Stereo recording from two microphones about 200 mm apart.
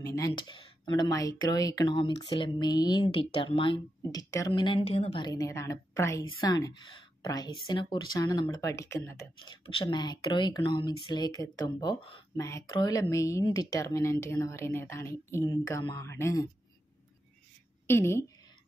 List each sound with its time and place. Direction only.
0.0 s speech: 15° left (ahead or behind)
0.3 s speech: 25° left (ahead or behind)
17.8 s speech: 10° left (ahead or behind)